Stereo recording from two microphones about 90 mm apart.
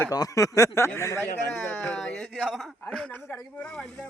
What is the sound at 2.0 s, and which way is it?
Speech, centre (ahead or behind).